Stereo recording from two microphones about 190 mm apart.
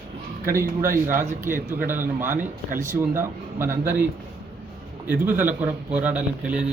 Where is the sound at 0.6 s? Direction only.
45° right (ahead or behind).